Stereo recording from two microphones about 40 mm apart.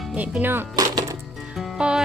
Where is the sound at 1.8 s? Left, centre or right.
Right.